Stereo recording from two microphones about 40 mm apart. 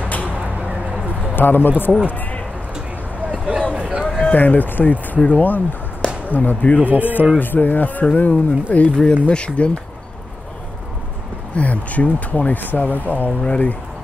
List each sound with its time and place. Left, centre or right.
0.0 s a sound: left
0.3 s a sound: right
1.3 s speech: left
3.3 s a sound: right
4.4 s speech: left
6.9 s speech: right
7.3 s speech: left
8.9 s speech: left
11.5 s speech: left